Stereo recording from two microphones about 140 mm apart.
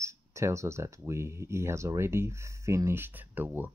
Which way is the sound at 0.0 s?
20° right (ahead or behind).